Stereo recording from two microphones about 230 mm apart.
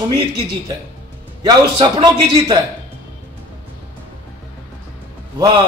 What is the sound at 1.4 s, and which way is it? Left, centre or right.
A man's voice, centre.